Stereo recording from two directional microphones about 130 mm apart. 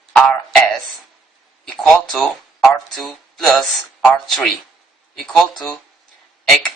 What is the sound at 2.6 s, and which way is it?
Speech, centre (ahead or behind).